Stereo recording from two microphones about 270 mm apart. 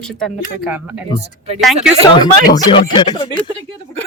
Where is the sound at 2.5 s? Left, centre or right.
Centre.